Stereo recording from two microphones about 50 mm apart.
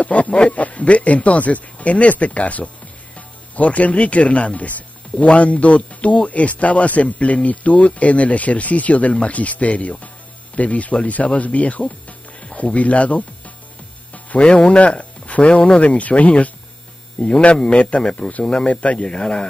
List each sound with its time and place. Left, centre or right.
0.0 s speech: left
12.1 s music: left
14.4 s speech: centre